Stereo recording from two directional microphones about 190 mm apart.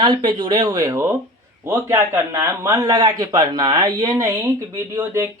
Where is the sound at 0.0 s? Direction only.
20° right (ahead or behind).